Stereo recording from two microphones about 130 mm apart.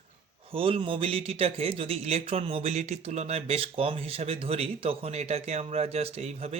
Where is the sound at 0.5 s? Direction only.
45° right (ahead or behind).